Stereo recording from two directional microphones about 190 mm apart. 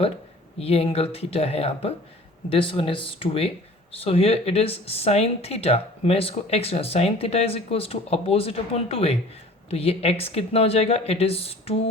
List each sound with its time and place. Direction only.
0.6 s speech: 30° left (ahead or behind)